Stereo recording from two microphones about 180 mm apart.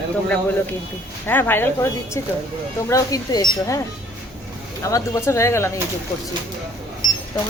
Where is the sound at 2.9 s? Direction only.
20° left (ahead or behind).